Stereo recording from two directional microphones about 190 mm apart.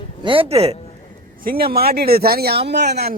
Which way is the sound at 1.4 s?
50° right (ahead or behind).